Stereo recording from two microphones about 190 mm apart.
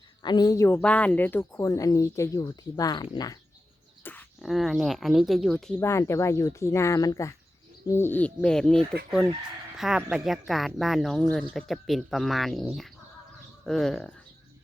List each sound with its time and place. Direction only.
0.2 s speech: 20° left (ahead or behind)
4.0 s a sound: 10° left (ahead or behind)
4.4 s speech: centre (ahead or behind)
5.8 s speech: 15° left (ahead or behind)